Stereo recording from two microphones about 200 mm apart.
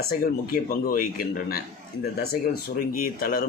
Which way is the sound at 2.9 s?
45° left (ahead or behind).